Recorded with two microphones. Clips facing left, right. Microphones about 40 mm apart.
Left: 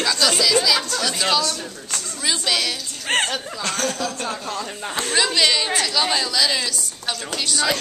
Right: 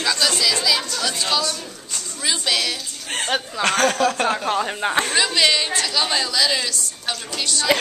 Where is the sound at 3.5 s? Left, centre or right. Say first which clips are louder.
Right 9 dB; right.